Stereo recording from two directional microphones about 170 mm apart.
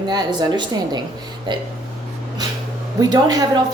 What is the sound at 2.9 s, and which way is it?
Speech, 25° right (ahead or behind).